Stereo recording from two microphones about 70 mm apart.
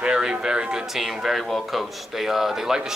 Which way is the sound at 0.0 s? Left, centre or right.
Centre.